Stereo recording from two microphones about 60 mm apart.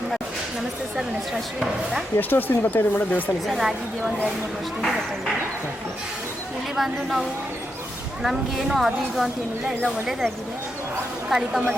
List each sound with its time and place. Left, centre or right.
1.5 s speech: centre
2.1 s speech: left
3.4 s speech: centre
6.7 s speech: centre
11.3 s speech: centre